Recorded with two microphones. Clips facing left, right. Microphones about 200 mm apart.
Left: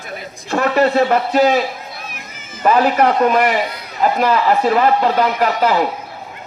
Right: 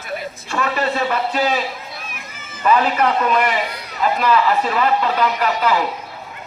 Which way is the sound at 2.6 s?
45° left (ahead or behind).